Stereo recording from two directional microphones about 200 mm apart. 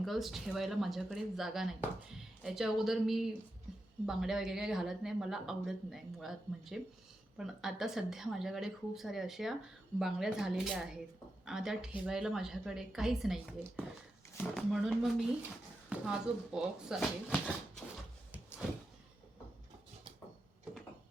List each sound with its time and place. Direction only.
0.0 s speech: centre (ahead or behind)
3.7 s music: centre (ahead or behind)
4.0 s speech: centre (ahead or behind)